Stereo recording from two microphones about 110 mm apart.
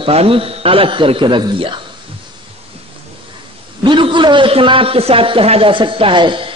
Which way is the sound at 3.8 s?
45° right (ahead or behind).